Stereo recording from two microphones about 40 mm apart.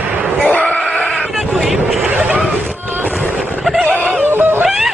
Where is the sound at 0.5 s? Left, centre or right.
Left.